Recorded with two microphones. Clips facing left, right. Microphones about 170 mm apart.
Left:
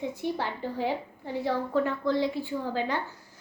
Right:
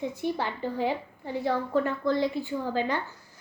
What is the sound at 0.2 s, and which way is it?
A woman's voice, 15° right (ahead or behind).